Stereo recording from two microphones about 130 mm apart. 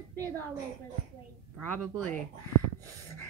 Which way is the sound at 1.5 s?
5° left (ahead or behind).